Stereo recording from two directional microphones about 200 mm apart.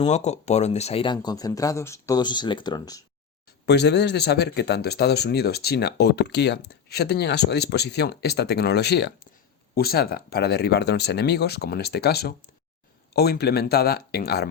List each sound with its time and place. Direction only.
0.0 s speech: 35° left (ahead or behind); by 3.0 s 20° left (ahead or behind)
3.7 s speech: 55° left (ahead or behind)